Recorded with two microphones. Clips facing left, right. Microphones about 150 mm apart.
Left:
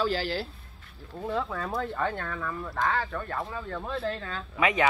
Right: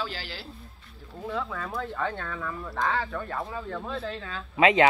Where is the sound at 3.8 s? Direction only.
Centre (ahead or behind).